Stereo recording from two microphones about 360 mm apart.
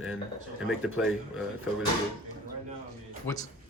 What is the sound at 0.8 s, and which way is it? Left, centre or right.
Speech, centre.